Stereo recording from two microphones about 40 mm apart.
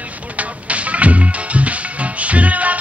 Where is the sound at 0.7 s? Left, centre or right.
Right.